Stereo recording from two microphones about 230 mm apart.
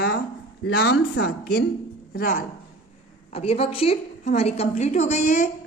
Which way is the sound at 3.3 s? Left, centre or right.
Left.